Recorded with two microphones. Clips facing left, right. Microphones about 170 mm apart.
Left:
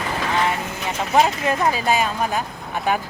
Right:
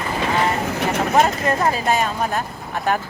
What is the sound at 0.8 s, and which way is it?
Vehicle, 70° right (ahead or behind).